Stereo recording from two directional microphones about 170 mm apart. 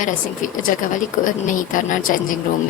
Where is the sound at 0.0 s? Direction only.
50° left (ahead or behind).